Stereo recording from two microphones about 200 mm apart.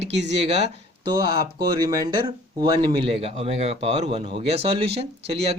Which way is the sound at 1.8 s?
20° right (ahead or behind).